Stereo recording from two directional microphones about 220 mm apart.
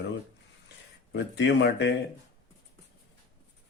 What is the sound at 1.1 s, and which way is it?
Speech, 50° left (ahead or behind).